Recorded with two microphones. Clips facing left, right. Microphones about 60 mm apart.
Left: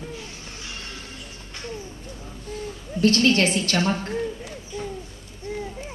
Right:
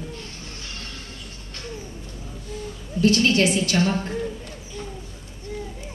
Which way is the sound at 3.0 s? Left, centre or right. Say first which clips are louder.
Even; left.